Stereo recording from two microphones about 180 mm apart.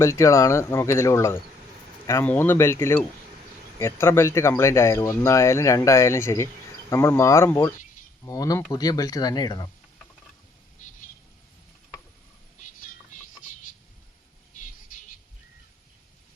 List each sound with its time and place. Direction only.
0.0 s speech: 15° left (ahead or behind)